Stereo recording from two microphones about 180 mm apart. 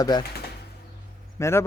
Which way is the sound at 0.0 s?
20° left (ahead or behind).